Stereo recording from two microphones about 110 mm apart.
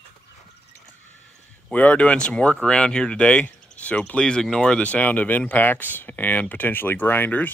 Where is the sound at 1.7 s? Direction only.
15° left (ahead or behind).